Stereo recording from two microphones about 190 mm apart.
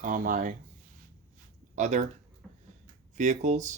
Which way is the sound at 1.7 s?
40° right (ahead or behind).